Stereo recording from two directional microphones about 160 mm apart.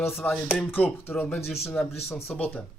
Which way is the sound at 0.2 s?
Centre (ahead or behind).